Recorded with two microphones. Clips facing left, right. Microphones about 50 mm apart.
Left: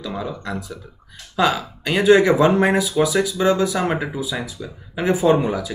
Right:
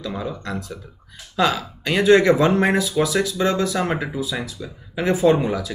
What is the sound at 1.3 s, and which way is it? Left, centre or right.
Speech, centre.